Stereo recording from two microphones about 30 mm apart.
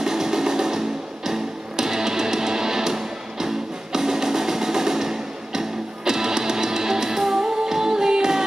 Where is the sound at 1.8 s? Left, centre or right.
Centre.